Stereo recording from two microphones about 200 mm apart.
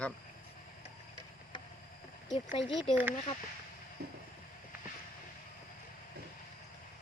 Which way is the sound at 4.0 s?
50° right (ahead or behind).